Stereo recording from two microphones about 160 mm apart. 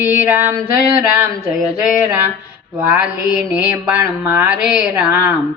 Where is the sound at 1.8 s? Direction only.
15° right (ahead or behind).